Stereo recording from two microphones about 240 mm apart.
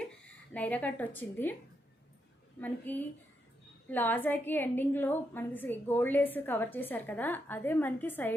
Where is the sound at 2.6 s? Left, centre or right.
Centre.